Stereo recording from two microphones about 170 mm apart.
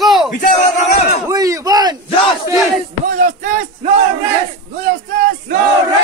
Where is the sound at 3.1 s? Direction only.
45° right (ahead or behind).